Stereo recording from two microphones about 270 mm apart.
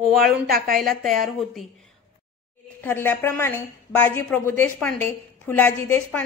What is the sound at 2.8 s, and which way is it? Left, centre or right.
A woman's voice, centre.